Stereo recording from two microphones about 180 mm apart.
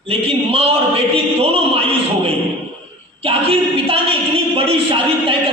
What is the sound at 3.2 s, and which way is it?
A woman's voice, 30° right (ahead or behind).